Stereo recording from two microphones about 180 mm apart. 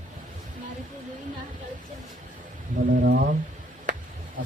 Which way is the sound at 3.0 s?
60° right (ahead or behind).